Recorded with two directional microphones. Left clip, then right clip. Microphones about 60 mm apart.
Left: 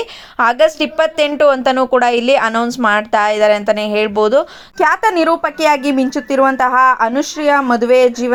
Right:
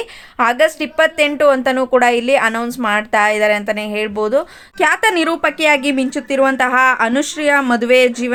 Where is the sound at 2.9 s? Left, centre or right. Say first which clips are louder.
Even; left.